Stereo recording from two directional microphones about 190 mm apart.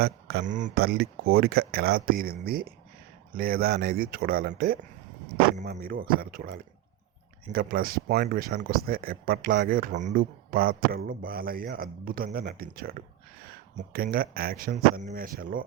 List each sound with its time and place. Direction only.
0.0 s speech: 55° right (ahead or behind)